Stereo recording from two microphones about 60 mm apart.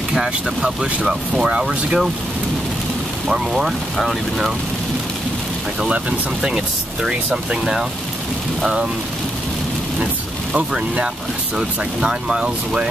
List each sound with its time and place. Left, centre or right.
0.1 s speech: centre
3.3 s speech: centre
5.8 s speech: centre
10.5 s speech: centre